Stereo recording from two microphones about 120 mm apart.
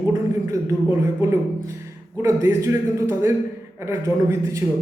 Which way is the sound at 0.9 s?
25° right (ahead or behind).